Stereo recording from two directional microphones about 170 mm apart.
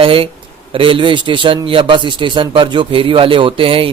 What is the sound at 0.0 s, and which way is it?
A man's voice, 30° right (ahead or behind).